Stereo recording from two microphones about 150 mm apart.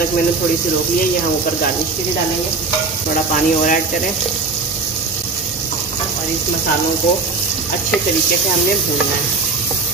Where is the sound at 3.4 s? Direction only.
60° left (ahead or behind).